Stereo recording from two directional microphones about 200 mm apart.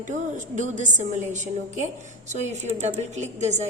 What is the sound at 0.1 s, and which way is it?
A woman's voice, 35° right (ahead or behind).